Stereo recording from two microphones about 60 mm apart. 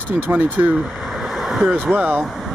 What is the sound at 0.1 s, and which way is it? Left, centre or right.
Speech, right.